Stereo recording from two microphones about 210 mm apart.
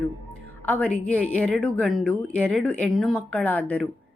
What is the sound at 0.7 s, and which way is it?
A woman's voice, 5° left (ahead or behind).